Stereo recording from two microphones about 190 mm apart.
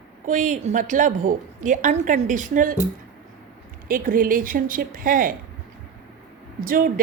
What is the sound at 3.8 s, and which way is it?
A woman's voice, 50° right (ahead or behind).